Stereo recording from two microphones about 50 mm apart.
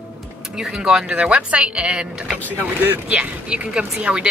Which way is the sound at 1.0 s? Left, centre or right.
Right.